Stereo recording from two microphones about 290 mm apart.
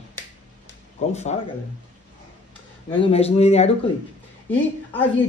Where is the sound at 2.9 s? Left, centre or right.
Centre.